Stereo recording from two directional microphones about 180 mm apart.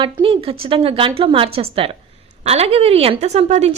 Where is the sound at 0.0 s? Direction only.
30° right (ahead or behind).